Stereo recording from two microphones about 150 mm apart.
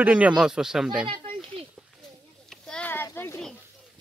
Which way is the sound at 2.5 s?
5° left (ahead or behind).